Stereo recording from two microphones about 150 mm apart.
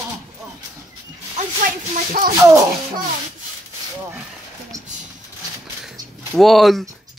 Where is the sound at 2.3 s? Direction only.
20° right (ahead or behind).